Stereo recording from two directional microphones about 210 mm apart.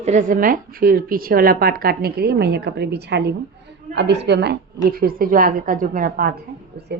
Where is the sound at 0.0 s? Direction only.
35° right (ahead or behind).